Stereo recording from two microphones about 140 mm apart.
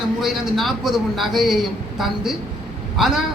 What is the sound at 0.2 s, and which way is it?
A man's voice, centre (ahead or behind).